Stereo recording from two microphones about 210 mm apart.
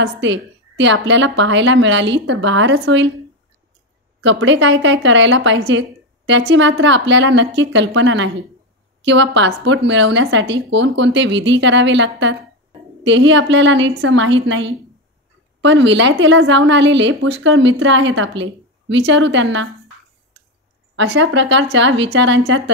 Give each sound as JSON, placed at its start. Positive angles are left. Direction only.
{"t": 0.2, "sound": "speech", "side_deg": -60}
{"t": 4.2, "sound": "speech", "side_deg": -60}
{"t": 20.9, "sound": "speech", "side_deg": -55}